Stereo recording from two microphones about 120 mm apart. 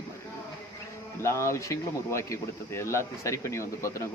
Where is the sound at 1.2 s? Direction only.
25° left (ahead or behind).